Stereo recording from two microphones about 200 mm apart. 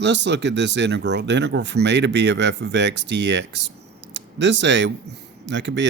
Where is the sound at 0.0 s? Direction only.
60° right (ahead or behind).